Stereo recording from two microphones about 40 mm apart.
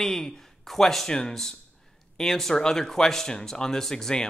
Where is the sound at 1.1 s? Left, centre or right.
Centre.